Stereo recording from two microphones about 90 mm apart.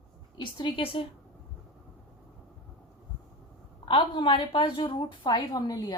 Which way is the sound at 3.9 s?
60° left (ahead or behind).